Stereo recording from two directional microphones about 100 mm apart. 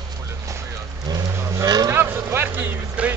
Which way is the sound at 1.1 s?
35° right (ahead or behind).